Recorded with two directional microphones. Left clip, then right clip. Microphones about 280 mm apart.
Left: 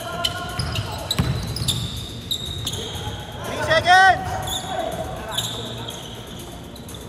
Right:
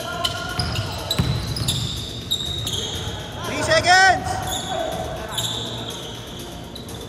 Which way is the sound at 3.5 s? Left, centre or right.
Centre.